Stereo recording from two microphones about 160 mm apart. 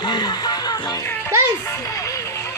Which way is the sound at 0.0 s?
25° left (ahead or behind).